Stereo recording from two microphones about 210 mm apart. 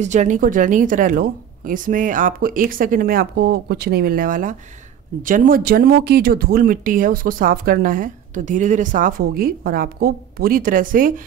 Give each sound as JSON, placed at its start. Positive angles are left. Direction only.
{"t": 0.0, "sound": "a woman's voice", "side_deg": -35}